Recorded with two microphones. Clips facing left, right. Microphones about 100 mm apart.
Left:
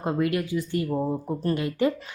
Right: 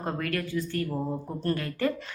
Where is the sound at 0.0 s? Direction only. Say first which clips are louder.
Left 6 dB; 15° left (ahead or behind).